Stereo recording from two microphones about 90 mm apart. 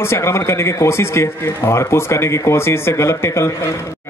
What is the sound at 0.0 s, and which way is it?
Speech, 30° left (ahead or behind).